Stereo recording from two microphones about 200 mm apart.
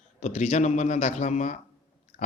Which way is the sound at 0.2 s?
35° left (ahead or behind).